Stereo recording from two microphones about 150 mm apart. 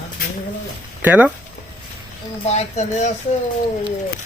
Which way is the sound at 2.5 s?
50° left (ahead or behind).